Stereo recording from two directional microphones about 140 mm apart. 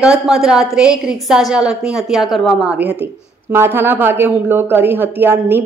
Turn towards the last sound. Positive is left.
turn(degrees=-15)  # may be behind; listen again after turning